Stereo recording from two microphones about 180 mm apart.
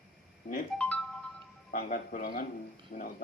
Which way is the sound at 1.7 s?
50° left (ahead or behind).